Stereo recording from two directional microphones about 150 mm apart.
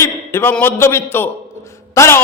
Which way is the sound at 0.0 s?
20° left (ahead or behind).